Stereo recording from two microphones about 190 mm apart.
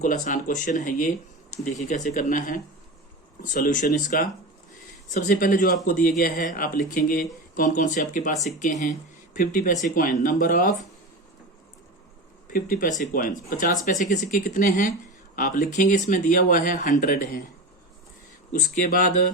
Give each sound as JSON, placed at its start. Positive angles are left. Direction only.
{"t": 0.0, "sound": "speech", "side_deg": 40}
{"t": 12.5, "sound": "speech", "side_deg": 50}
{"t": 18.5, "sound": "speech", "side_deg": 45}